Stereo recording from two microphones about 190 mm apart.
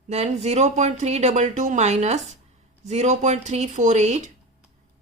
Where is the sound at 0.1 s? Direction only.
35° right (ahead or behind).